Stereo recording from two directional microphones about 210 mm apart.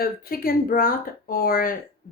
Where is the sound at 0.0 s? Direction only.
45° left (ahead or behind).